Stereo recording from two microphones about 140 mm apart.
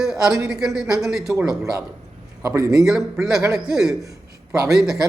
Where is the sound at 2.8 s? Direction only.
5° right (ahead or behind).